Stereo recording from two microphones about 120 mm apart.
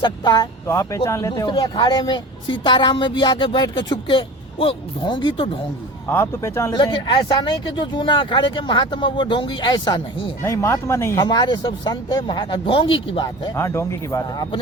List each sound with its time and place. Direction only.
0.0 s a woman's voice: 40° left (ahead or behind)
0.7 s a woman's voice: 25° left (ahead or behind); by 5.5 s 40° left (ahead or behind)
6.1 s speech: 20° left (ahead or behind)
6.7 s a woman's voice: 40° left (ahead or behind)
10.4 s speech: 25° left (ahead or behind)
11.2 s a woman's voice: 35° left (ahead or behind)
13.6 s speech: 25° left (ahead or behind)